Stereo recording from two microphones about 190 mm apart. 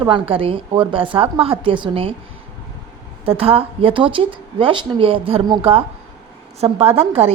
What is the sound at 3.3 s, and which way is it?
A woman's voice, 30° right (ahead or behind).